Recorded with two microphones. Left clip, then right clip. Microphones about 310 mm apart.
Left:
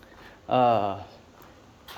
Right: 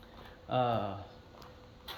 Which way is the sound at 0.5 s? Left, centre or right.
Centre.